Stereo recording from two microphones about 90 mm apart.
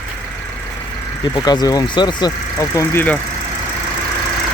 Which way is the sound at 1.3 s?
45° left (ahead or behind).